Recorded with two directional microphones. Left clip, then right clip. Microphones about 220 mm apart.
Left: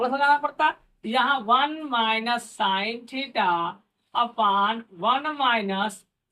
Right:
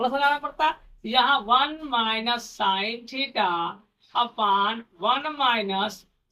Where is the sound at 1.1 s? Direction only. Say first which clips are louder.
Right 1 dB; 20° left (ahead or behind).